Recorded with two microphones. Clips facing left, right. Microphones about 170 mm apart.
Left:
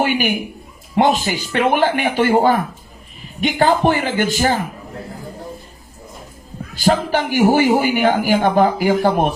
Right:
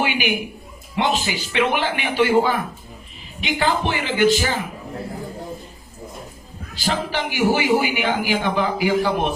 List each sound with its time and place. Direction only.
0.0 s a sound: 45° left (ahead or behind)
0.9 s a man's voice: 45° left (ahead or behind)
6.7 s a man's voice: 45° left (ahead or behind)